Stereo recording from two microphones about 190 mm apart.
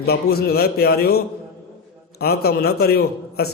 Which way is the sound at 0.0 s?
55° left (ahead or behind).